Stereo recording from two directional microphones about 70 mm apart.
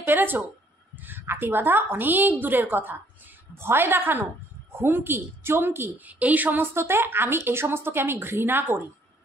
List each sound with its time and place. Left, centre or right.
0.0 s a woman's voice: right
6.0 s a woman's voice: right